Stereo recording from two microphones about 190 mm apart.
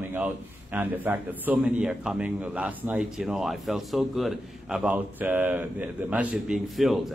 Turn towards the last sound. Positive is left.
turn(degrees=0)  # may be behind; listen again after turning